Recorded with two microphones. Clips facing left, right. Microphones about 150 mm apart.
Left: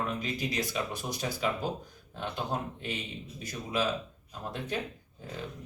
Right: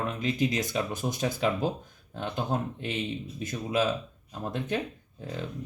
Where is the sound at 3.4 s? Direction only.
50° right (ahead or behind).